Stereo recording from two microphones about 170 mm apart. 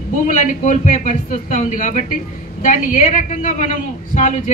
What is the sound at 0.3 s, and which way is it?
A man's voice, 45° left (ahead or behind).